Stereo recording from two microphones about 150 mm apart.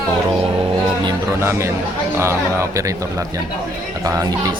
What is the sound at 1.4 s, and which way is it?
Speech, 15° right (ahead or behind).